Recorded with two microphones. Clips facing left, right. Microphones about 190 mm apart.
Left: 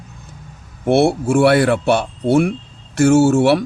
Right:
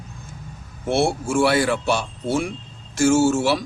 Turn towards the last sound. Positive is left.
turn(degrees=60)  # may be behind; listen again after turning